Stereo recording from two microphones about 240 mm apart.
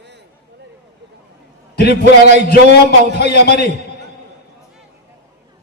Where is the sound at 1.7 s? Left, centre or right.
Left.